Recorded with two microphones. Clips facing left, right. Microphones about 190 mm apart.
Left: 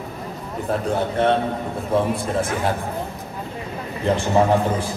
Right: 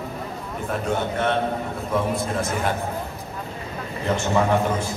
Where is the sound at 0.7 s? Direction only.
30° left (ahead or behind).